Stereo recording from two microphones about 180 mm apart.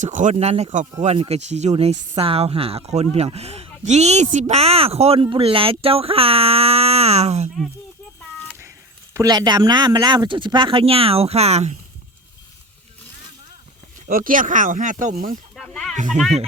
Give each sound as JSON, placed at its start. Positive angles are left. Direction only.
{"t": 0.0, "sound": "speech", "side_deg": -45}
{"t": 9.1, "sound": "speech", "side_deg": -20}
{"t": 14.1, "sound": "speech", "side_deg": -50}
{"t": 15.5, "sound": "snake", "side_deg": 0}
{"t": 16.0, "sound": "speech", "side_deg": -45}